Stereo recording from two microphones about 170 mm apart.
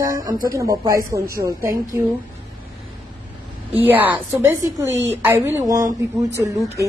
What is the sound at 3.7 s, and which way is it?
A woman's voice, 10° right (ahead or behind).